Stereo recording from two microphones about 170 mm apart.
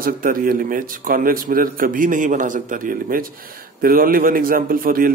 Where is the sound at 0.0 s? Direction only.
55° right (ahead or behind).